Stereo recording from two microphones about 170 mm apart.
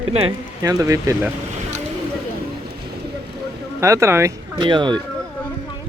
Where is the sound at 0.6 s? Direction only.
20° right (ahead or behind).